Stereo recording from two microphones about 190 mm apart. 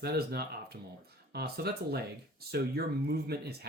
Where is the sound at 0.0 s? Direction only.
55° right (ahead or behind).